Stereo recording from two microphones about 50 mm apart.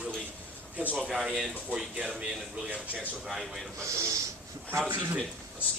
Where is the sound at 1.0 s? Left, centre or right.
Centre.